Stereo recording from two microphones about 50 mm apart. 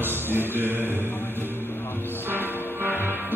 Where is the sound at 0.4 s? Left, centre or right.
Right.